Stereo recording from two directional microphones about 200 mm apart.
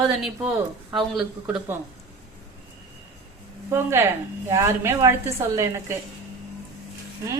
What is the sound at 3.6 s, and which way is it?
Speech, 10° right (ahead or behind).